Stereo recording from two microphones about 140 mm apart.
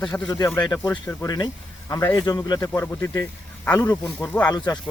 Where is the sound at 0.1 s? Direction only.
25° left (ahead or behind).